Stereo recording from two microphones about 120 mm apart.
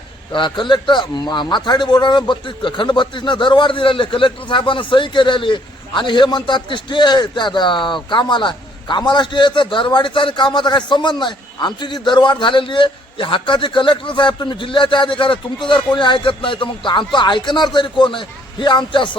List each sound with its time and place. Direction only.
0.3 s a man's voice: 40° left (ahead or behind)